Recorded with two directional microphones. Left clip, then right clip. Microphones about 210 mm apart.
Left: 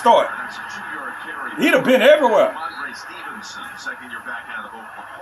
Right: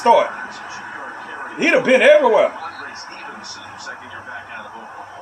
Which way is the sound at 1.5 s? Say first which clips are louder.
Right 1 dB; 15° left (ahead or behind).